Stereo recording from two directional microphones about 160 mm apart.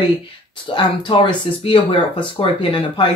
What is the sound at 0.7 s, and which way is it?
Speech, 30° left (ahead or behind).